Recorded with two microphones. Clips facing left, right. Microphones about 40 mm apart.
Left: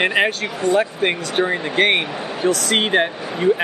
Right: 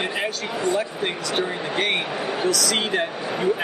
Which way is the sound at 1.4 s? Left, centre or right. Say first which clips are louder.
Left 8 dB; left.